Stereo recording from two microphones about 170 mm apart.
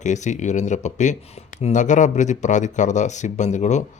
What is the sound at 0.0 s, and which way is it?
Speech, 45° left (ahead or behind).